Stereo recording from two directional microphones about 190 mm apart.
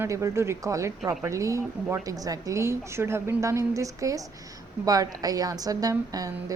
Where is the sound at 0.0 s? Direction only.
15° right (ahead or behind).